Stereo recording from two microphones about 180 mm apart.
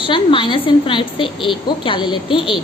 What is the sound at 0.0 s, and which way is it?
A woman's voice, 30° left (ahead or behind).